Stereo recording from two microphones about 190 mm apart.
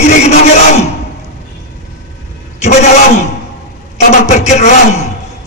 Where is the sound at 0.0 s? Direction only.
35° left (ahead or behind).